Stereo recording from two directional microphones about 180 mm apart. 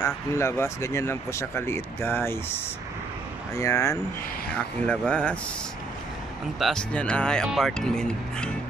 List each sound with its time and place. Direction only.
0.0 s speech: 15° left (ahead or behind)
3.5 s speech: 15° left (ahead or behind)
4.5 s speech: 5° left (ahead or behind)
6.6 s speech: 5° left (ahead or behind)